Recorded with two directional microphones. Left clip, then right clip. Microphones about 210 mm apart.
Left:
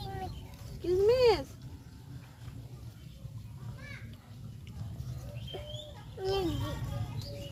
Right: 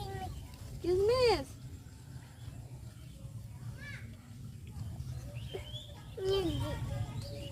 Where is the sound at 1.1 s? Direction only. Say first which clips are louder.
Left 4 dB; 20° right (ahead or behind).